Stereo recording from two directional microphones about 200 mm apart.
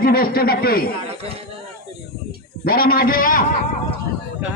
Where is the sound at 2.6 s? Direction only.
50° left (ahead or behind).